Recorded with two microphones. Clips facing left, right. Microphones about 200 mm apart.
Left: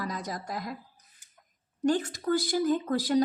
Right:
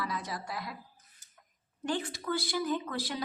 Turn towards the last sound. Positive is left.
turn(degrees=40)  # may be behind; listen again after turning